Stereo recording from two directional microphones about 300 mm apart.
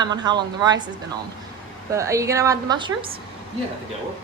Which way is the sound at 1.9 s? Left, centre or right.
Centre.